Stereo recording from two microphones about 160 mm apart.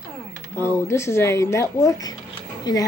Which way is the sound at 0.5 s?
15° left (ahead or behind).